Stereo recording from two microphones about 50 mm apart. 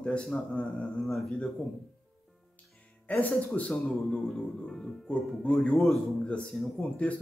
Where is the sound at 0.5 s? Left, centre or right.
Left.